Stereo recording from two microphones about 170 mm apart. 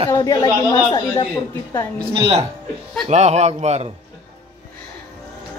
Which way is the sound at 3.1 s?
40° right (ahead or behind).